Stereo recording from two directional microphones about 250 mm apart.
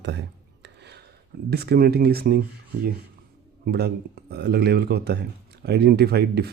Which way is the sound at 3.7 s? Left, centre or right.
Right.